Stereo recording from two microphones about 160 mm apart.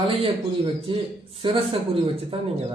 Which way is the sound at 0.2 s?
35° right (ahead or behind).